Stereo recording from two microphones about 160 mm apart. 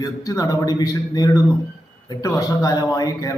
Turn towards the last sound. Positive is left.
turn(degrees=25)  # may be behind; listen again after turning